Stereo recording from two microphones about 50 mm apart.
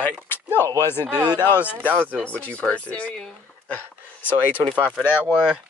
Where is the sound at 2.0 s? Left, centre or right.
Left.